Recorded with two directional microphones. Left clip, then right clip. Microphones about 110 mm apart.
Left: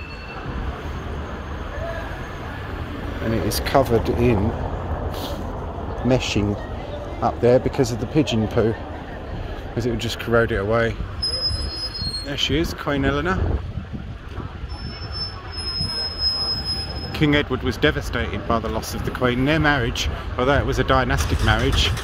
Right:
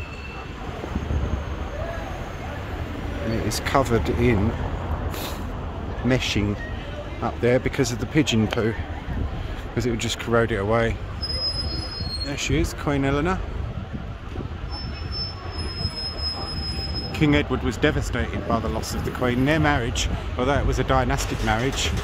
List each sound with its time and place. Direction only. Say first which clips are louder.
3.4 s speech: left 3 dB; centre (ahead or behind)
3.8 s speech: left 3 dB; 15° right (ahead or behind)
6.0 s speech: left 2 dB; 10° right (ahead or behind)
9.8 s speech: left 1 dB; 15° right (ahead or behind)
12.3 s speech: left 4 dB; centre (ahead or behind)
17.1 s speech: left 2 dB; centre (ahead or behind)